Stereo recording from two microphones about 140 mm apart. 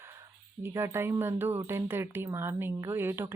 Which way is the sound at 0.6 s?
15° right (ahead or behind).